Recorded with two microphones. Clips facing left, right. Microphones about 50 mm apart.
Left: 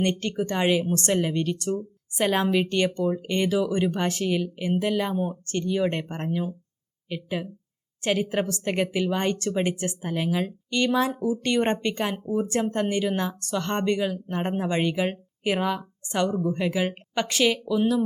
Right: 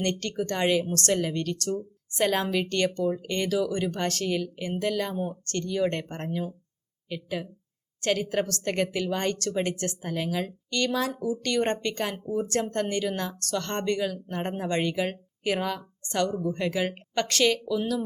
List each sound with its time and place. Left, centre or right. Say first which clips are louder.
0.0 s speech: left 3 dB; centre